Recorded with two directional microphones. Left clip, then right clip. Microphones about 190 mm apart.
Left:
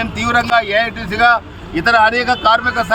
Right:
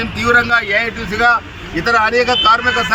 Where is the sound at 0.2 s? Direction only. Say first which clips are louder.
Right 2 dB; 30° left (ahead or behind).